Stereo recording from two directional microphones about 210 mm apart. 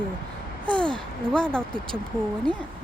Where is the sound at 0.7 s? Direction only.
20° right (ahead or behind).